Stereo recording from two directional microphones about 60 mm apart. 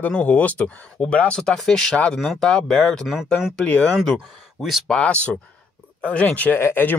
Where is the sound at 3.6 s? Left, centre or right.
Left.